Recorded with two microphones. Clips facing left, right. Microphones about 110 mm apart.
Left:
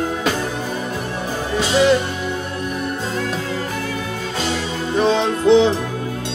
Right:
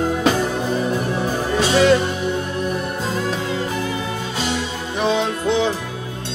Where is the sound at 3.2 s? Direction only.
20° right (ahead or behind).